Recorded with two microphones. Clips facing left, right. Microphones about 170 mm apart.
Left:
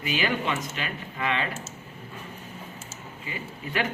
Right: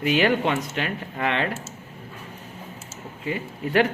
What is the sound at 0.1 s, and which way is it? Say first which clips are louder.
Speech: right 6 dB; 60° right (ahead or behind).